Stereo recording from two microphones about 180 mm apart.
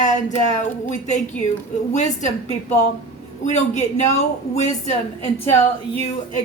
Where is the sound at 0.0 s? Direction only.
40° left (ahead or behind).